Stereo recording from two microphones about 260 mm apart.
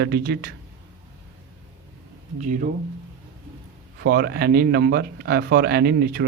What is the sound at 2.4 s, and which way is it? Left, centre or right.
Speech, right.